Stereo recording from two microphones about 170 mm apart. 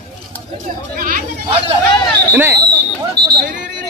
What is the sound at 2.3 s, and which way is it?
Speech, 15° right (ahead or behind).